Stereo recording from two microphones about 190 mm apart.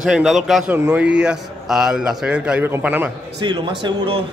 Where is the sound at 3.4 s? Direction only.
25° right (ahead or behind).